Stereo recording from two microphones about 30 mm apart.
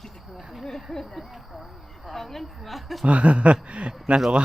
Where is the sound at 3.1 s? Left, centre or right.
Right.